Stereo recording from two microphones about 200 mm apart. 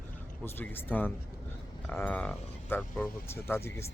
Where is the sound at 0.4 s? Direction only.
10° left (ahead or behind).